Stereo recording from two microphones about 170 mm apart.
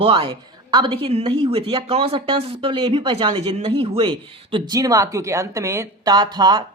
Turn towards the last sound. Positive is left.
turn(degrees=-25)  # may be behind; listen again after turning